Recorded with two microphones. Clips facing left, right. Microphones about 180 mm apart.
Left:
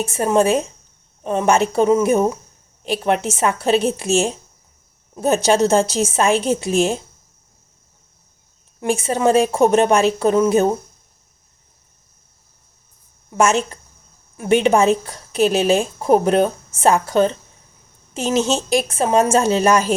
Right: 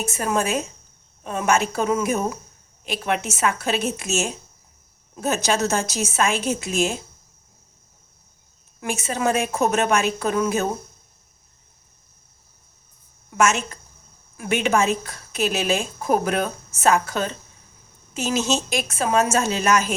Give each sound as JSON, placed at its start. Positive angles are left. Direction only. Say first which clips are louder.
{"t": 0.0, "sound": "a woman's voice", "louder": "left 7 dB", "side_deg": 30}
{"t": 8.8, "sound": "a woman's voice", "louder": "left 6 dB", "side_deg": 30}
{"t": 13.3, "sound": "a woman's voice", "louder": "left 4 dB", "side_deg": 35}